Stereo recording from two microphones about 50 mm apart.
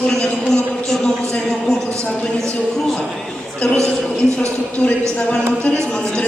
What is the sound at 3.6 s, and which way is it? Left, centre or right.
Speech, left.